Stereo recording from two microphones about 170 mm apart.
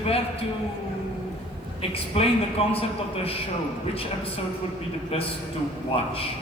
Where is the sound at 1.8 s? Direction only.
35° left (ahead or behind).